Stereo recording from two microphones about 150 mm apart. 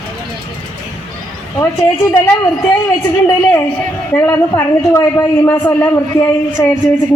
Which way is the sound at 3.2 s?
15° left (ahead or behind).